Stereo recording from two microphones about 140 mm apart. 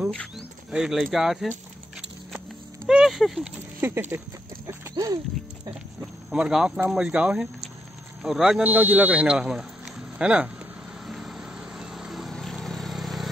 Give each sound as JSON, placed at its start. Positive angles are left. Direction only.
{"t": 0.1, "sound": "speech", "side_deg": 0}
{"t": 2.9, "sound": "speech", "side_deg": -5}
{"t": 3.8, "sound": "speech", "side_deg": -15}
{"t": 4.9, "sound": "speech", "side_deg": -25}
{"t": 6.3, "sound": "speech", "side_deg": -5}
{"t": 11.1, "sound": "vehicle", "side_deg": 0}